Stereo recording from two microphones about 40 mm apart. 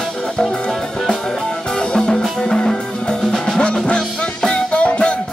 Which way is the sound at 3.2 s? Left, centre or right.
Centre.